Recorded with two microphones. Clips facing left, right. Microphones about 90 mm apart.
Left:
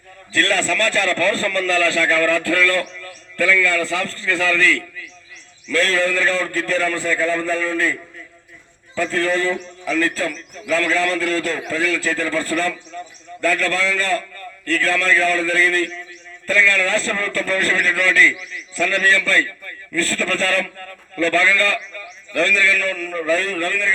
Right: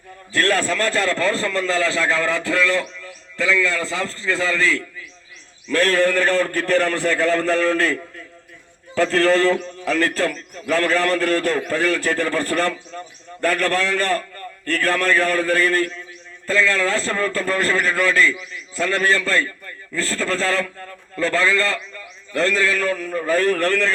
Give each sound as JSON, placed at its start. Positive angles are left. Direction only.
{"t": 0.3, "sound": "a man's voice", "side_deg": -40}
{"t": 5.6, "sound": "a man's voice", "side_deg": -50}
{"t": 23.3, "sound": "a man's voice", "side_deg": -50}